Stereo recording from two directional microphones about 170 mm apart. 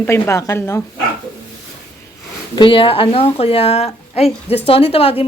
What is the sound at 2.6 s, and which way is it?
Speech, 30° left (ahead or behind).